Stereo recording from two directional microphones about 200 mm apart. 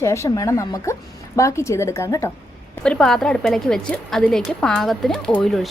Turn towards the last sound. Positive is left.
turn(degrees=0)  # may be behind; listen again after turning